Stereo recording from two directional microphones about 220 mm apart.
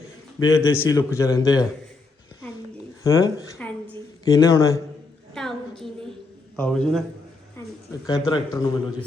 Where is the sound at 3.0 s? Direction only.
15° left (ahead or behind).